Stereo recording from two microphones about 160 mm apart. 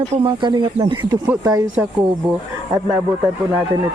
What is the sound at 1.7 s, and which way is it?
Speech, 10° right (ahead or behind).